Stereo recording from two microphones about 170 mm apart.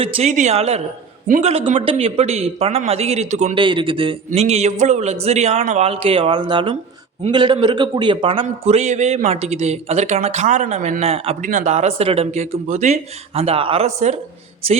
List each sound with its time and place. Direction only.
0.0 s a man's voice: 40° right (ahead or behind)
1.8 s a man's voice: 35° right (ahead or behind)
3.6 s a man's voice: 30° right (ahead or behind)